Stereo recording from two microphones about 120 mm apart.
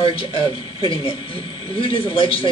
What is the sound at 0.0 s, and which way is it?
Speech, 50° left (ahead or behind).